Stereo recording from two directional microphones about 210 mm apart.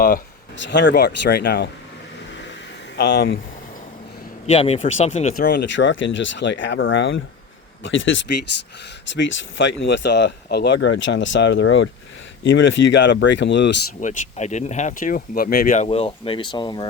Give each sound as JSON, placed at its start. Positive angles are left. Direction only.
{"t": 0.5, "sound": "speech", "side_deg": 60}
{"t": 2.9, "sound": "speech", "side_deg": 50}
{"t": 4.5, "sound": "speech", "side_deg": 30}
{"t": 5.6, "sound": "speech", "side_deg": 60}
{"t": 14.0, "sound": "speech", "side_deg": 35}